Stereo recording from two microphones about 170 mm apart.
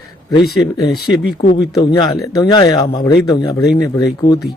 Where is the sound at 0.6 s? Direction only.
25° left (ahead or behind).